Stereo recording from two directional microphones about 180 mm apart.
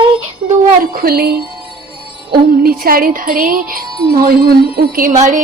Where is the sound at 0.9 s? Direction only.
60° right (ahead or behind).